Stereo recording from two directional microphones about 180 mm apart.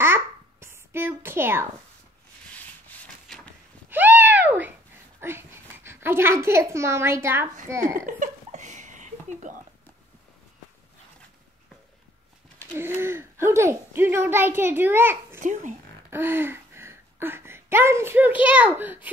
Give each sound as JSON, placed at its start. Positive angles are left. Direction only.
{"t": 0.0, "sound": "babbling", "side_deg": -15}
{"t": 3.3, "sound": "vehicle", "side_deg": 5}
{"t": 3.9, "sound": "a sound", "side_deg": -10}
{"t": 5.2, "sound": "a woman's voice", "side_deg": -15}
{"t": 8.2, "sound": "laughter", "side_deg": -40}
{"t": 12.7, "sound": "speech", "side_deg": -15}
{"t": 15.4, "sound": "speech", "side_deg": -45}
{"t": 16.1, "sound": "speech", "side_deg": -10}